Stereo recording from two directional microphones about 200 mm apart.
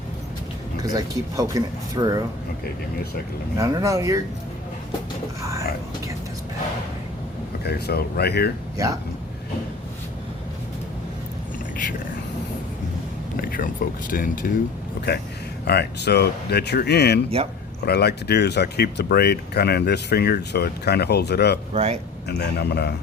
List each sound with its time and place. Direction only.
0.8 s speech: 20° right (ahead or behind)
3.6 s speech: 15° right (ahead or behind)
7.6 s speech: 55° left (ahead or behind)
13.4 s a sound: 45° left (ahead or behind)
14.1 s speech: 45° left (ahead or behind)
15.0 s speech: 55° left (ahead or behind)
21.7 s speech: 30° right (ahead or behind)
22.3 s speech: 55° left (ahead or behind)